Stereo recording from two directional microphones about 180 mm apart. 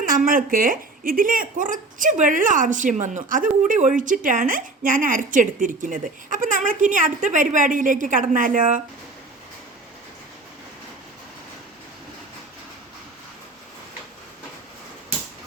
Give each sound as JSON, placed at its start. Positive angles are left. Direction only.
{"t": 0.0, "sound": "a woman's voice", "side_deg": -50}